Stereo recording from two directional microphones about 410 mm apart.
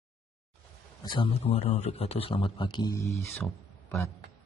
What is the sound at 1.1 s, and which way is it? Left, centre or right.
A man's voice, centre.